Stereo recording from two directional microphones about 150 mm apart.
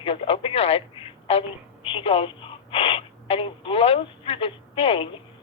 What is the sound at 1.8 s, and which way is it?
Speech, 35° left (ahead or behind).